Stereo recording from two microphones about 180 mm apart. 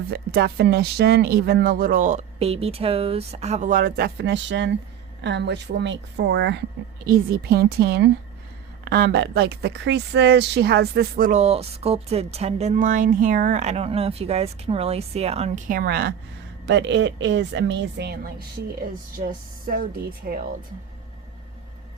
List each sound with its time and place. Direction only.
0.1 s speech: 60° right (ahead or behind); by 4.8 s 85° right
5.2 s a woman's voice: 75° right (ahead or behind)
7.0 s a woman's voice: 55° right (ahead or behind)
11.3 s speech: 35° right (ahead or behind); by 16.1 s 60° right (ahead or behind)
16.6 s a woman's voice: 85° right; by 20.4 s 55° right (ahead or behind)